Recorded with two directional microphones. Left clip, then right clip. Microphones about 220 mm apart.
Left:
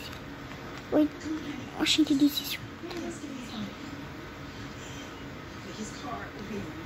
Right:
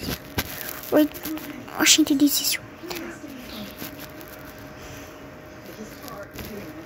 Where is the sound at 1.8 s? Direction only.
15° right (ahead or behind).